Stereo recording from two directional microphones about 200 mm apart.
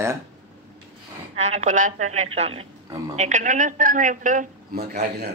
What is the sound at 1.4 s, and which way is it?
A woman's voice, 35° right (ahead or behind).